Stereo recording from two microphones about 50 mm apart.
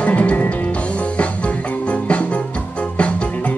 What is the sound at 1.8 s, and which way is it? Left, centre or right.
Music, left.